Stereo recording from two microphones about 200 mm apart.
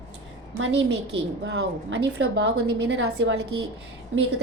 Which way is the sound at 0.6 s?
60° right (ahead or behind).